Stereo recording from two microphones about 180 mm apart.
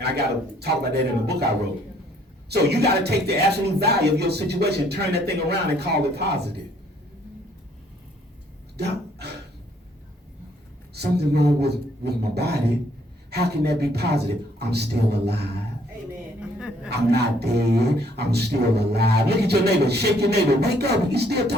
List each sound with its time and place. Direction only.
0.0 s speech: 65° right (ahead or behind)
2.5 s speech: 65° right (ahead or behind)
8.8 s speech: 65° right (ahead or behind)
10.9 s speech: 65° right (ahead or behind)
16.4 s a sound: 5° right (ahead or behind)
16.9 s speech: 65° right (ahead or behind)